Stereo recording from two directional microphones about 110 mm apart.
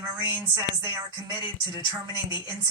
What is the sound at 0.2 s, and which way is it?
Speech, 25° right (ahead or behind).